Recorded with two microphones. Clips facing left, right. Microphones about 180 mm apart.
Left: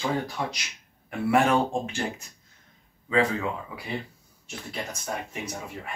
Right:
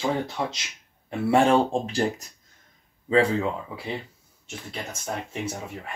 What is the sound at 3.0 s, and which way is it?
Speech, 30° right (ahead or behind).